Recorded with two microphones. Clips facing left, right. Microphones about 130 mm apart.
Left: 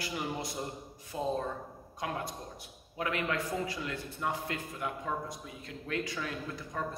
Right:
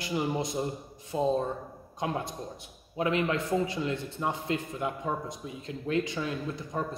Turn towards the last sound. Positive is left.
turn(degrees=-20)  # may be behind; listen again after turning